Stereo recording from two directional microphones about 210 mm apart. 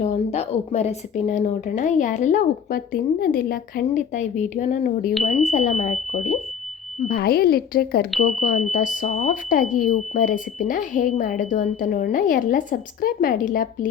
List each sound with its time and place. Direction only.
0.0 s speech: 30° left (ahead or behind)
7.1 s speech: 45° left (ahead or behind)